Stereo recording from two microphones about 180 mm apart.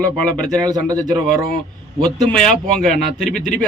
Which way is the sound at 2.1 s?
5° left (ahead or behind).